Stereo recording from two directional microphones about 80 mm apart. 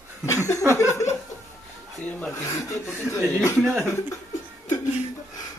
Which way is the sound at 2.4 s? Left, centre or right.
Left.